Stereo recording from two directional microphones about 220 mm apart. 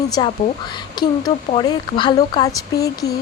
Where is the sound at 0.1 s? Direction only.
20° left (ahead or behind).